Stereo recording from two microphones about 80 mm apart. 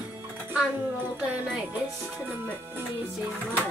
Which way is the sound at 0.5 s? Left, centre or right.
Centre.